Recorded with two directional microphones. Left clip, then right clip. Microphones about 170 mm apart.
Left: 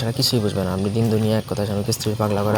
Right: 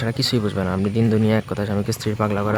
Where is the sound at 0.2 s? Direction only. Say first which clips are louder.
Left 2 dB; 10° right (ahead or behind).